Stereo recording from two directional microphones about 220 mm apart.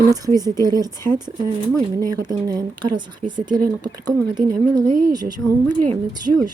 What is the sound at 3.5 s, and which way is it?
Speech, 90° right.